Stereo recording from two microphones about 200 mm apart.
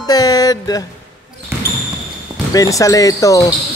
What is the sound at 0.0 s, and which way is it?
Music, 20° left (ahead or behind).